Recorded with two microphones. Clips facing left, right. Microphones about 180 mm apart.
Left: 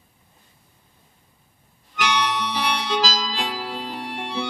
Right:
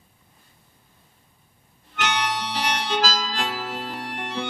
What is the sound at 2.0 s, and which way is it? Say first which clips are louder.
Harmonica: left 2 dB; 50° right (ahead or behind).